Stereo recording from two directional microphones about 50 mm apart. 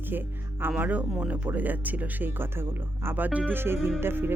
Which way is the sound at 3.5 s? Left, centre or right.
Right.